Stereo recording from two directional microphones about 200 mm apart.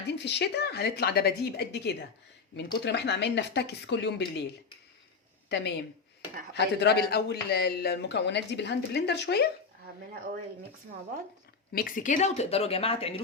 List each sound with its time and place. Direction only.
0.2 s speech: 60° left (ahead or behind)
5.5 s speech: 55° left (ahead or behind)
11.7 s a woman's voice: 45° left (ahead or behind); by 13.2 s 30° left (ahead or behind)